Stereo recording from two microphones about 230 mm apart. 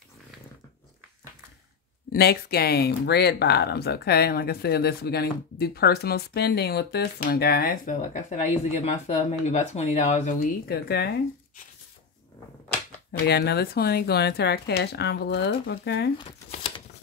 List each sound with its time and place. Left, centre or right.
2.1 s speech: left
13.3 s speech: left
16.2 s a sound: left